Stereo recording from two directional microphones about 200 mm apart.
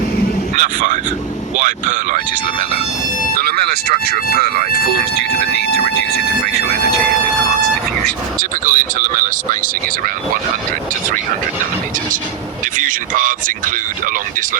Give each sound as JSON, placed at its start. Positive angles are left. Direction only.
{"t": 0.5, "sound": "a man's voice", "side_deg": -40}
{"t": 8.0, "sound": "speech", "side_deg": -40}
{"t": 12.7, "sound": "speech", "side_deg": -40}